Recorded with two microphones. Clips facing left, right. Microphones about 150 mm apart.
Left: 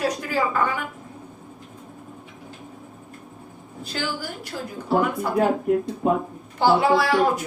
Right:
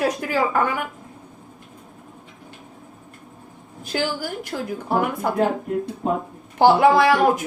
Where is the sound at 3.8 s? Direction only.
45° right (ahead or behind).